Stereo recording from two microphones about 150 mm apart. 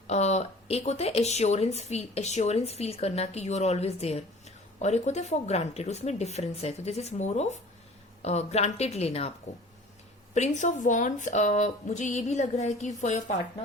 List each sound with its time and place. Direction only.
0.1 s speech: 45° left (ahead or behind)
10.3 s speech: 50° left (ahead or behind)